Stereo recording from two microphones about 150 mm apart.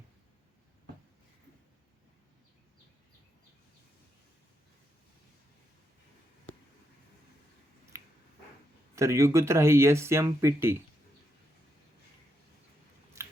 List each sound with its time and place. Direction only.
7.9 s dog: 20° right (ahead or behind)
9.0 s speech: 20° right (ahead or behind)